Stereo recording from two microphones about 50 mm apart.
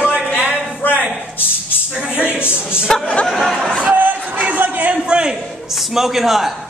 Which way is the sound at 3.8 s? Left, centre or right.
Right.